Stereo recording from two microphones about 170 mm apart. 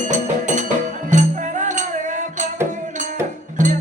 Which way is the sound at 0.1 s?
45° right (ahead or behind).